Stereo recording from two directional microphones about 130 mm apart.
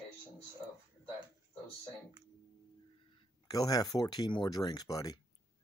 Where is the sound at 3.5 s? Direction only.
30° left (ahead or behind).